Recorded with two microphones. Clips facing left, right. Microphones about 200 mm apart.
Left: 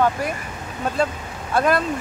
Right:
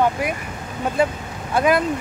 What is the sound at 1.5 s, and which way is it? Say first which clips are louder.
Speech: right 1 dB; 15° right (ahead or behind).